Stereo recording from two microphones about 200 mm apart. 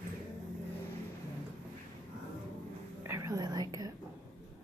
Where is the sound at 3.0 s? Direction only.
15° right (ahead or behind).